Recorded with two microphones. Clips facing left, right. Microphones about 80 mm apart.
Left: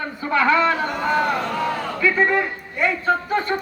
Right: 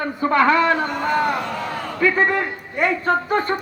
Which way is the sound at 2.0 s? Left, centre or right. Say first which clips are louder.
Right 1 dB; right.